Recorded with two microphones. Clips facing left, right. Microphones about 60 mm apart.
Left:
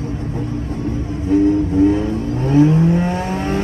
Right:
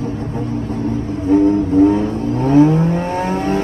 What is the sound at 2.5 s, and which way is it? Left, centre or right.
Vehicle, right.